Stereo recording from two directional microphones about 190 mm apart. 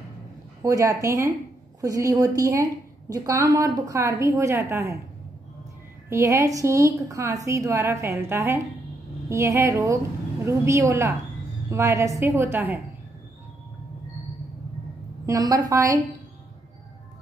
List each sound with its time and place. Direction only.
0.6 s a woman's voice: 15° right (ahead or behind)
6.0 s a woman's voice: 15° right (ahead or behind)
15.2 s a woman's voice: 20° right (ahead or behind)